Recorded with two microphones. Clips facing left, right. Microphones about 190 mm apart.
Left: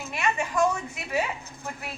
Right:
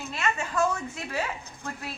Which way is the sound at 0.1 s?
15° left (ahead or behind).